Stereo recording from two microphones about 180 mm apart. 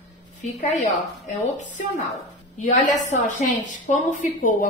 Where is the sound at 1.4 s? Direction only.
45° left (ahead or behind).